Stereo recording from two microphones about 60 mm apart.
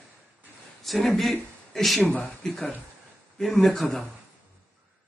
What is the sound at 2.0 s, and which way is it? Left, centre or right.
Speech, centre.